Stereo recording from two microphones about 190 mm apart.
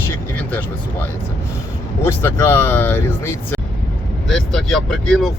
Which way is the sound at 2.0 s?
10° left (ahead or behind).